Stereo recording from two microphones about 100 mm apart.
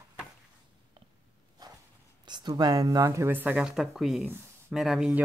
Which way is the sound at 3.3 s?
15° right (ahead or behind).